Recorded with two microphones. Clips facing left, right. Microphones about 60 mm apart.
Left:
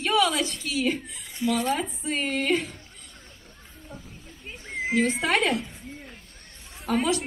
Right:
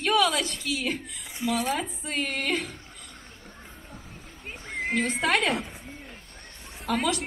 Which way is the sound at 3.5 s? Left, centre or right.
Right.